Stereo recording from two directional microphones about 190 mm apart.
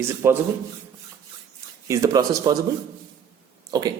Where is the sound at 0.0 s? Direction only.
15° right (ahead or behind).